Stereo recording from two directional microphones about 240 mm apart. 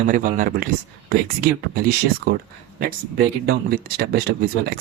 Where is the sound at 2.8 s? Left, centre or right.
Right.